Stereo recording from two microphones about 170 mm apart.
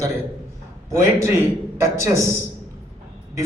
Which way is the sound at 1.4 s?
15° right (ahead or behind).